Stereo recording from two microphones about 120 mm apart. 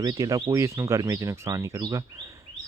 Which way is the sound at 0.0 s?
30° right (ahead or behind).